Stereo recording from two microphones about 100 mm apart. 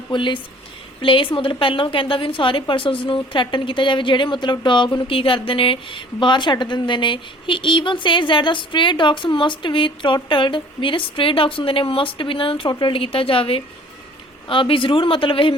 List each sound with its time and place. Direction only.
0.1 s a woman's voice: 55° left (ahead or behind)